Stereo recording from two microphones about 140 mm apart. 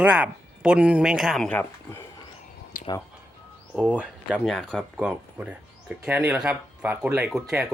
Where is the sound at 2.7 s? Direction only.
85° left.